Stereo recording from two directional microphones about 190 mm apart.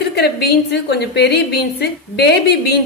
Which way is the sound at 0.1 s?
55° left (ahead or behind).